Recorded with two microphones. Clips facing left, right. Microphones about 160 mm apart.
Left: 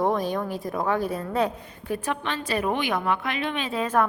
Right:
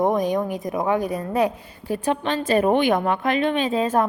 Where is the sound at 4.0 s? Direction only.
30° right (ahead or behind).